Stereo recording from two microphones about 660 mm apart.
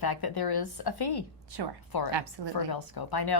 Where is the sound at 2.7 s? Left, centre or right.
Left.